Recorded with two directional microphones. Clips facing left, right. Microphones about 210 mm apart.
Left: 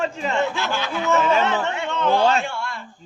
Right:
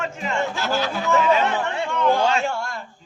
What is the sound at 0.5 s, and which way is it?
Speech, 40° right (ahead or behind).